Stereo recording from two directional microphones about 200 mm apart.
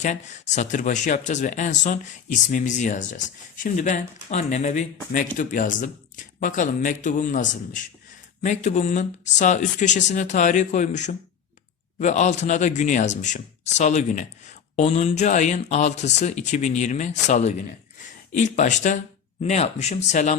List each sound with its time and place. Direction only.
0.0 s speech: 35° left (ahead or behind)
8.4 s speech: 35° left (ahead or behind)